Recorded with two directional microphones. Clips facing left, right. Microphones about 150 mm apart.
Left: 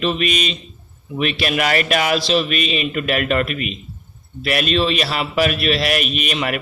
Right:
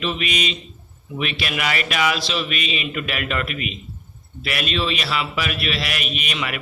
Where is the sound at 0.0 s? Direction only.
40° left (ahead or behind).